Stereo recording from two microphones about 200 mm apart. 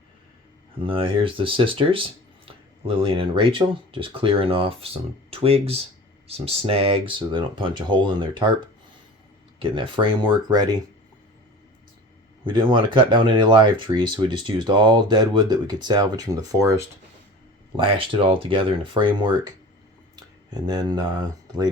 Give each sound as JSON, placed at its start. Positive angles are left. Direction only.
{"t": 0.9, "sound": "speech", "side_deg": -25}
{"t": 9.6, "sound": "speech", "side_deg": -25}
{"t": 12.7, "sound": "speech", "side_deg": -25}
{"t": 17.7, "sound": "speech", "side_deg": -25}
{"t": 20.7, "sound": "speech", "side_deg": -20}